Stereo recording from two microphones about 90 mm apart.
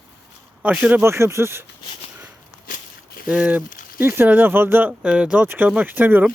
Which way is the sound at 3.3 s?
15° right (ahead or behind).